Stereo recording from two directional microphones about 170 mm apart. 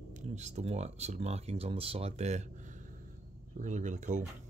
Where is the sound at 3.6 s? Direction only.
45° right (ahead or behind).